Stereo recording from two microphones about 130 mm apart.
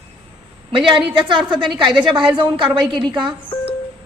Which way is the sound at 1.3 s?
40° right (ahead or behind).